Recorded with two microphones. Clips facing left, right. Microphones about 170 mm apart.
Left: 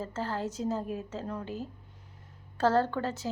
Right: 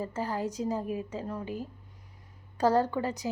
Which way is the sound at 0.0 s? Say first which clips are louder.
Right 2 dB; 15° right (ahead or behind).